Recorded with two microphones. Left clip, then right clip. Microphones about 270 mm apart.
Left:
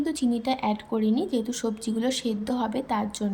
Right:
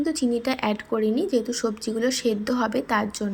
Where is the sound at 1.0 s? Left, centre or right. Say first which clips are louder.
Right 3 dB; right.